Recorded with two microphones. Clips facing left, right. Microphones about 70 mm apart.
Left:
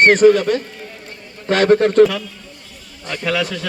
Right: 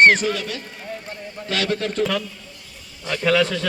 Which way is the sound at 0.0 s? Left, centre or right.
Left.